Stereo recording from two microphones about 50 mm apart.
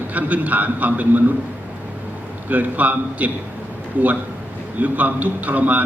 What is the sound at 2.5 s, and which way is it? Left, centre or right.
Speech, right.